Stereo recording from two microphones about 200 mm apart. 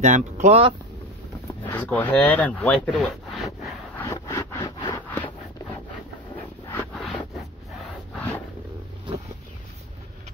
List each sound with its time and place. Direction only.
0.0 s speech: 35° right (ahead or behind)
1.7 s speech: 5° left (ahead or behind)
4.0 s wood: 15° left (ahead or behind)
5.1 s a sound: 10° left (ahead or behind)